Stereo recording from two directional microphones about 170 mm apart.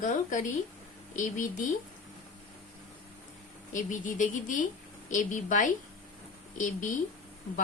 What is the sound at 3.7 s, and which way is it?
A woman's voice, 50° left (ahead or behind).